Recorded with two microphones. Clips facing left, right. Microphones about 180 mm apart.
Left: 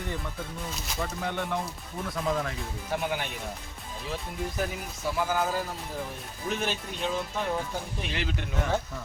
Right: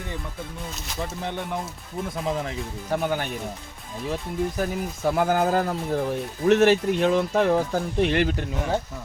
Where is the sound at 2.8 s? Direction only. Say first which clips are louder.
Right 5 dB; 45° right (ahead or behind).